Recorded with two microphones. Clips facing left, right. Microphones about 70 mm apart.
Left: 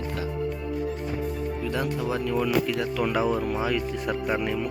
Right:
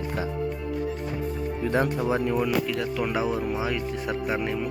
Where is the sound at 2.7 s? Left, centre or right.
Centre.